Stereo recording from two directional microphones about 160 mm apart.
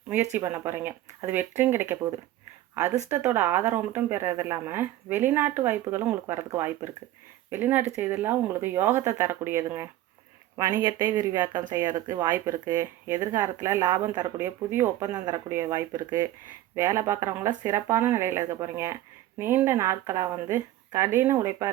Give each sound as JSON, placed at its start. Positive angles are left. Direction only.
{"t": 0.3, "sound": "speech", "side_deg": -15}